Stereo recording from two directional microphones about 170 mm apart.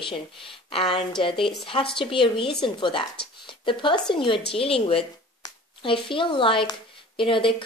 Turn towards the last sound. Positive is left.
turn(degrees=30)  # may be behind; listen again after turning